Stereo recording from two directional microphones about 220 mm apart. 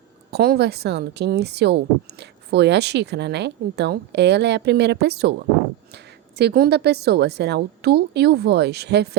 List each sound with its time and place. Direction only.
0.3 s a woman's voice: 45° right (ahead or behind)
6.3 s a woman's voice: 45° right (ahead or behind)